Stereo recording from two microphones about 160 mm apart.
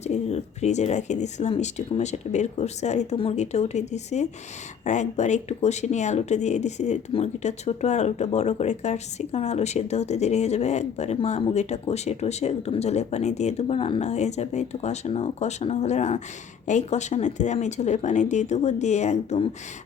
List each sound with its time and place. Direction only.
0.0 s speech: 45° left (ahead or behind)